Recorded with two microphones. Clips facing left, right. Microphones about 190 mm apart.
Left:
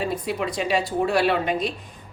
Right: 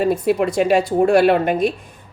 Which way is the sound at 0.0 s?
50° right (ahead or behind).